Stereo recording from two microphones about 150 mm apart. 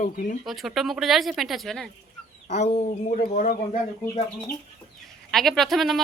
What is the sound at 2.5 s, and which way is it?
Speech, 50° left (ahead or behind).